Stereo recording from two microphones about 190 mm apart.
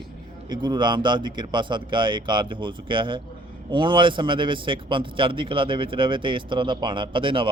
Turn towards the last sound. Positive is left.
turn(degrees=-25)  # may be behind; listen again after turning